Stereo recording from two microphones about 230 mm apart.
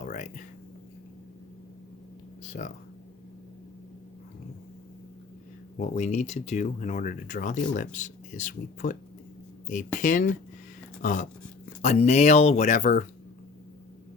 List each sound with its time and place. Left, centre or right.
0.0 s a sound: left
2.5 s speech: left
5.7 s speech: left
10.0 s speech: left